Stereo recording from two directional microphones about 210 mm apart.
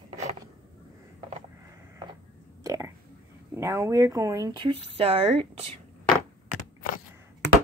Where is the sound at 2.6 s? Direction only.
15° right (ahead or behind).